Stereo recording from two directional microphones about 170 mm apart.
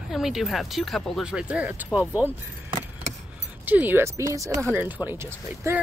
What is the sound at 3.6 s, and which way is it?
Speech, 10° right (ahead or behind).